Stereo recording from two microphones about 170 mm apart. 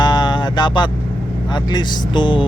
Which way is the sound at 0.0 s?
25° left (ahead or behind).